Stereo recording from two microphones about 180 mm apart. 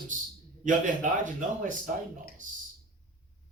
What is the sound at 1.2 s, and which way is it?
A man's voice, 45° right (ahead or behind).